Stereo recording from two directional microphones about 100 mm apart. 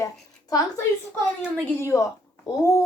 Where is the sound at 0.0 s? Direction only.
35° left (ahead or behind).